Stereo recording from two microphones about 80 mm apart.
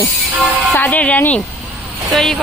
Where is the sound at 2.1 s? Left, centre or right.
Centre.